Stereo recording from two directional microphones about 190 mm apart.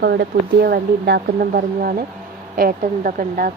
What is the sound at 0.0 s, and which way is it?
Speech, 55° right (ahead or behind).